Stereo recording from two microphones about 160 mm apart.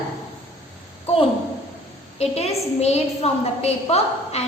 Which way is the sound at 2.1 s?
40° left (ahead or behind).